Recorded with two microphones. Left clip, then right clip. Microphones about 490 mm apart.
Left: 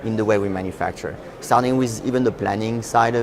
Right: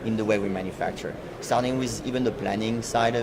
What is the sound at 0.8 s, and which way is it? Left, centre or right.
Speech, left.